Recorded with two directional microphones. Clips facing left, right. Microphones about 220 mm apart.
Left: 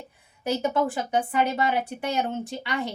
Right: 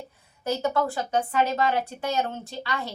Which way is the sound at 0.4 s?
15° left (ahead or behind).